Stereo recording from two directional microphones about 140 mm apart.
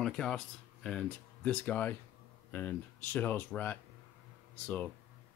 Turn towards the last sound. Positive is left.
turn(degrees=10)  # may be behind; listen again after turning